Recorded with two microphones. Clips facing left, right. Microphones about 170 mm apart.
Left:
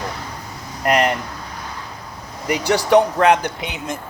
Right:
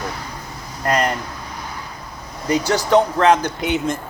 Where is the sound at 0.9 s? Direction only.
15° left (ahead or behind).